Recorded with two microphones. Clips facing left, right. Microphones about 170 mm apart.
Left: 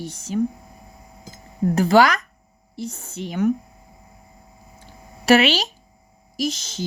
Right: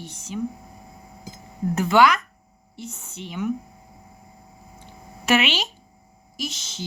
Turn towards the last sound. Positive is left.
turn(degrees=45)  # may be behind; listen again after turning